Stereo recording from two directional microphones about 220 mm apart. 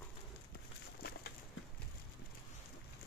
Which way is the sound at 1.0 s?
45° left (ahead or behind).